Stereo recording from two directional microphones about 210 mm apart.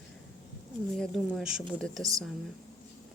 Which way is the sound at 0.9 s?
Centre (ahead or behind).